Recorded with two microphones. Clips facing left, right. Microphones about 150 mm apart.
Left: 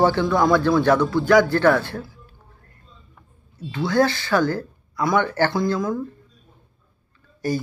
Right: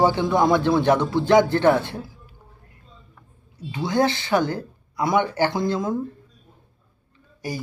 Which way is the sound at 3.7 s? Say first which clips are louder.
Left 2 dB; 15° right (ahead or behind).